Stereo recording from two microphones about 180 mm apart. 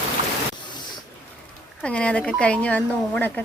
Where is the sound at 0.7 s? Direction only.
25° left (ahead or behind).